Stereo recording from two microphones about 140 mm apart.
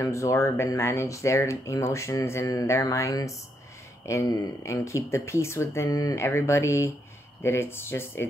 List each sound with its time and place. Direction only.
0.0 s speech: 20° left (ahead or behind)